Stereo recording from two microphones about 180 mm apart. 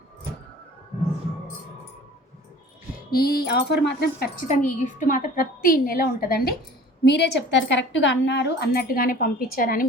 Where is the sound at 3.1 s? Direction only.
60° left (ahead or behind).